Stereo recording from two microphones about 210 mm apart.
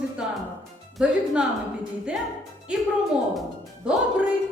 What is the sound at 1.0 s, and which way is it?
Speech, 5° right (ahead or behind).